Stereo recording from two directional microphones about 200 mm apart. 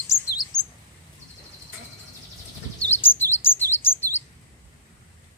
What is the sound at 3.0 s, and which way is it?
Chirp, 10° left (ahead or behind).